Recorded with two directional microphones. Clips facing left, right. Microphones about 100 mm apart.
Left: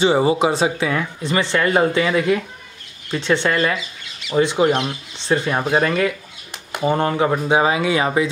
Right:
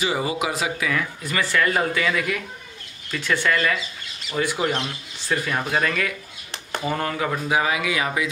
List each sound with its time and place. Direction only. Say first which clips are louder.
0.0 s speech: left 8 dB; 30° left (ahead or behind)